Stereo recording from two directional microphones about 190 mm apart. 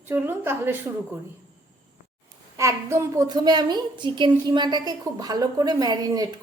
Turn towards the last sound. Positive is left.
turn(degrees=-20)  # may be behind; listen again after turning